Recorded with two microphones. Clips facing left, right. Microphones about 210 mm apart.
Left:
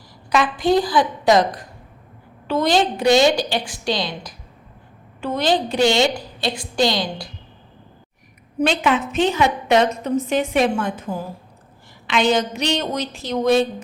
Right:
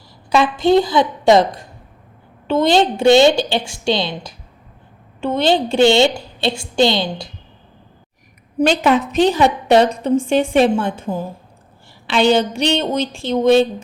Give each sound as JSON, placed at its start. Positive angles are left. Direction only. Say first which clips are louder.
{"t": 0.3, "sound": "a woman's voice", "louder": "right 4 dB", "side_deg": -25}
{"t": 8.8, "sound": "a woman's voice", "louder": "right 4 dB", "side_deg": -40}